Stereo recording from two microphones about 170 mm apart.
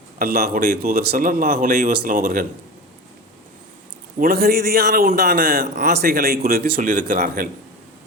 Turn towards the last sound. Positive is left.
turn(degrees=-55)  # may be behind; listen again after turning